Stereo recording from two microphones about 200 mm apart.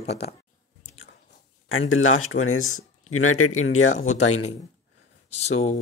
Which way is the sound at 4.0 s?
35° left (ahead or behind).